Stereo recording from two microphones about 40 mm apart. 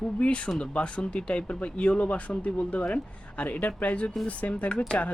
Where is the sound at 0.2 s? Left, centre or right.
Left.